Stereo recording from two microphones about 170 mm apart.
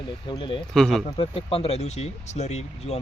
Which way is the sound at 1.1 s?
30° left (ahead or behind).